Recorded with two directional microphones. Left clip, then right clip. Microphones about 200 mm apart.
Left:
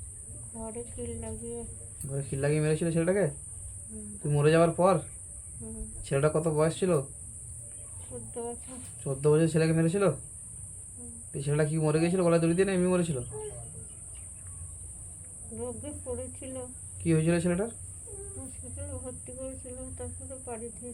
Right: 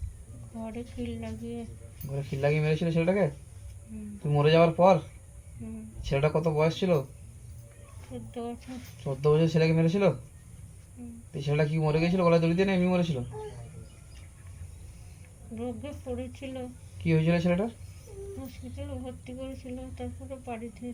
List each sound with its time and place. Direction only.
0.6 s speech: 15° left (ahead or behind)
4.3 s speech: 15° left (ahead or behind)
6.1 s speech: 15° left (ahead or behind)
8.3 s speech: 15° left (ahead or behind)
11.3 s speech: 15° left (ahead or behind)
15.5 s speech: 15° left (ahead or behind)